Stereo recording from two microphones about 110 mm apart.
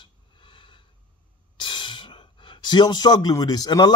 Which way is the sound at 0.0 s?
50° left (ahead or behind).